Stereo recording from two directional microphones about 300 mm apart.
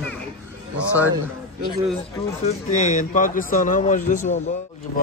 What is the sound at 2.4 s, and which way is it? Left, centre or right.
Speech, left.